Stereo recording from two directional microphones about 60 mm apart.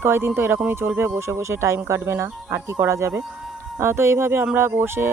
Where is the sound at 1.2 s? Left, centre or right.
Right.